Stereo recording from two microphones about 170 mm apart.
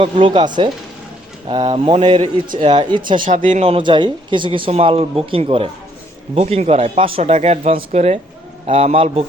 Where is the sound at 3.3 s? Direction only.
45° right (ahead or behind).